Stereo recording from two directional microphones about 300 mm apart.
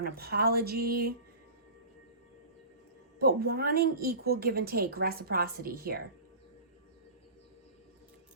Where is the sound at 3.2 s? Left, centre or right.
Right.